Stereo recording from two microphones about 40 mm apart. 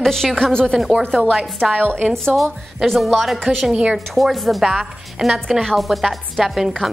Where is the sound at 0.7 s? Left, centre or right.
Centre.